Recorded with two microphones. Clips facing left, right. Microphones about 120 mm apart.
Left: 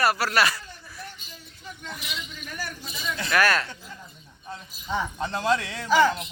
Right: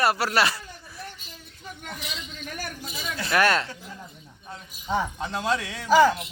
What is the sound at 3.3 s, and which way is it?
Speech, 25° right (ahead or behind).